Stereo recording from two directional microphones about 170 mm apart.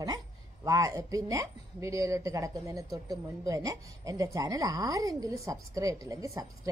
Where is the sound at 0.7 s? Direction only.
20° right (ahead or behind).